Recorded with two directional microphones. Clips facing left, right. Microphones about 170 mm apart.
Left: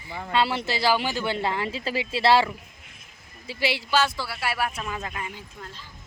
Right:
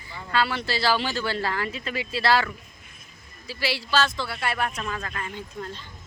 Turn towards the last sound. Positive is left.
turn(degrees=10)  # may be behind; listen again after turning